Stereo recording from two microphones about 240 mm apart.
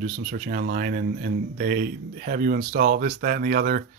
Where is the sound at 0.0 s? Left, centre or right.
Right.